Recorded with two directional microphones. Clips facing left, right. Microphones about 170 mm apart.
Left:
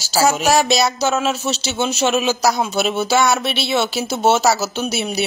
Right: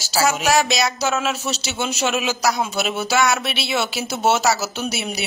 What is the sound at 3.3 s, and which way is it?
Speech, 5° right (ahead or behind).